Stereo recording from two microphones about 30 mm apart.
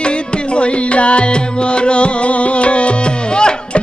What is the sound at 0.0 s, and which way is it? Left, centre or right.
Music, left.